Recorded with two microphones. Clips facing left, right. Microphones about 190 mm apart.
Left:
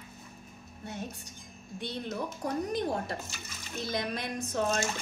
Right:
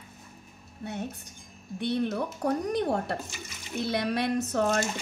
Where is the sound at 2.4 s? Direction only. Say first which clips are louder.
Right 4 dB; 65° right (ahead or behind).